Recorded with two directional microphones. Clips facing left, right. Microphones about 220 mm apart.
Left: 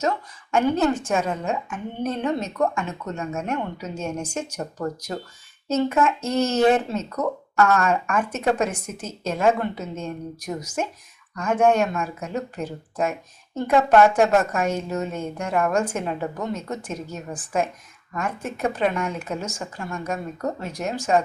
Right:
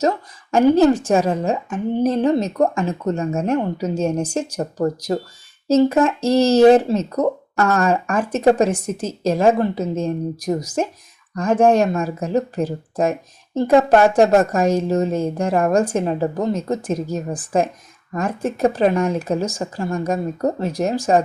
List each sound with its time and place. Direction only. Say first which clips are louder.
0.5 s speech: right 7 dB; 35° right (ahead or behind)